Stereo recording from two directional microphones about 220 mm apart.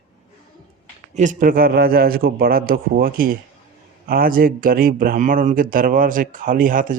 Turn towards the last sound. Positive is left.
turn(degrees=-40)  # may be behind; listen again after turning